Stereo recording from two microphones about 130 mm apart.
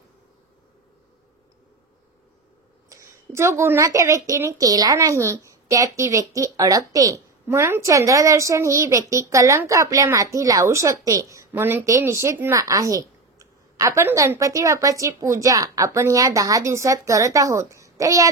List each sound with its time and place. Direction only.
2.9 s a woman's voice: 20° right (ahead or behind)